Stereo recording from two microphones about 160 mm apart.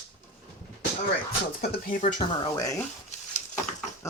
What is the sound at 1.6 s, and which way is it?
Speech, 80° left.